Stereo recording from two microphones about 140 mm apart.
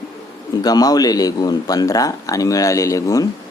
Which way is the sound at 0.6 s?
25° left (ahead or behind).